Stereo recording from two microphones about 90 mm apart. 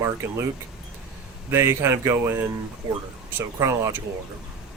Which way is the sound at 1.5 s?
30° right (ahead or behind).